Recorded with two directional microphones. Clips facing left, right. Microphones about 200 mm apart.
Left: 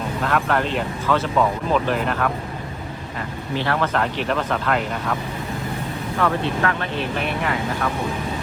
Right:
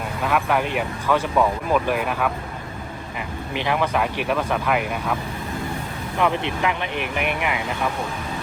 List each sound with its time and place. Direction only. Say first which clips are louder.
0.2 s speech: even; 10° right (ahead or behind)
6.1 s speech: even; 15° right (ahead or behind)